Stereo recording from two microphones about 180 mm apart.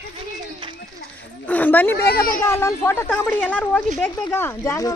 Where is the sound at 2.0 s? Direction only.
60° left (ahead or behind).